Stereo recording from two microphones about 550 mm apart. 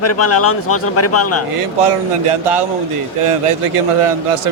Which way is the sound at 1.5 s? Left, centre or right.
Right.